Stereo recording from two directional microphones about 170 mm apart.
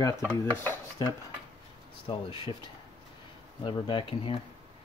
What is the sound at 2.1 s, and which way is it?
Speech, 30° left (ahead or behind).